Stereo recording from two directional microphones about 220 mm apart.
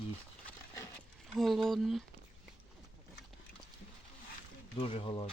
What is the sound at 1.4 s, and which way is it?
Speech, centre (ahead or behind).